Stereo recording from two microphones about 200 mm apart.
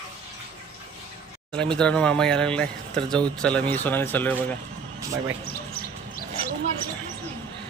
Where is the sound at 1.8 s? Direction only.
5° left (ahead or behind).